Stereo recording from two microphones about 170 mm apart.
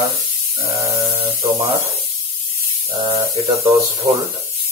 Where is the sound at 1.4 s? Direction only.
20° right (ahead or behind).